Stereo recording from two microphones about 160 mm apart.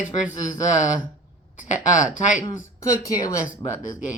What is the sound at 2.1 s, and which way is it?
Speech, 50° left (ahead or behind).